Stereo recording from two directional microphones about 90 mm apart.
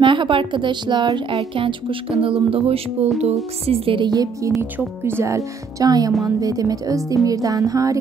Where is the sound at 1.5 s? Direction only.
75° right (ahead or behind).